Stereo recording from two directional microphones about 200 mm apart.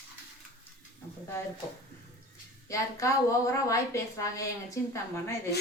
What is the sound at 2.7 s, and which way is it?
A woman's voice, 15° left (ahead or behind).